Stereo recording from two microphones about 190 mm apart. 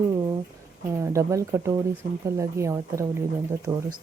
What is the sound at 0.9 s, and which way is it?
Speech, 15° right (ahead or behind).